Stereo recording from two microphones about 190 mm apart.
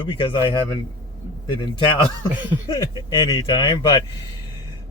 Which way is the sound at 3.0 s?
25° left (ahead or behind).